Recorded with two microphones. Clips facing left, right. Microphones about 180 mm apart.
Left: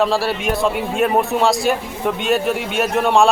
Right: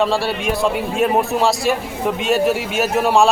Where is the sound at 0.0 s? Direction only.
Centre (ahead or behind).